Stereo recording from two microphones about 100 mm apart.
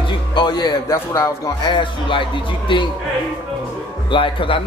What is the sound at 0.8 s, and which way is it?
Speech, 30° left (ahead or behind).